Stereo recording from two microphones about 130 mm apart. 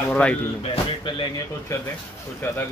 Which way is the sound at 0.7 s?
40° left (ahead or behind).